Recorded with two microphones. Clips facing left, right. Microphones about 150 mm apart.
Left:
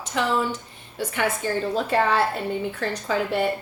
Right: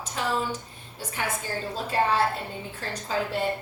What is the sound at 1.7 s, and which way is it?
A woman's voice, 70° left (ahead or behind).